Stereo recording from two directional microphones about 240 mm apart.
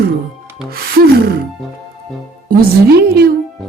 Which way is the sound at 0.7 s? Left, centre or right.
Right.